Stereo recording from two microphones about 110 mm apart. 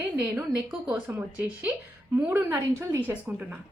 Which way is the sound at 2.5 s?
25° right (ahead or behind).